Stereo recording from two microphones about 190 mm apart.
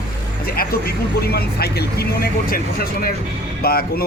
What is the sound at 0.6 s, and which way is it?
Speech, 55° left (ahead or behind).